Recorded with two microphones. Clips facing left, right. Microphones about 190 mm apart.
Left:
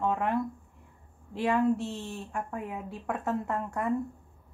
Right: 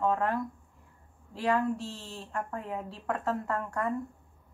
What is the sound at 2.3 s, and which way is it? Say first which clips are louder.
Speech: right 2 dB; 10° left (ahead or behind).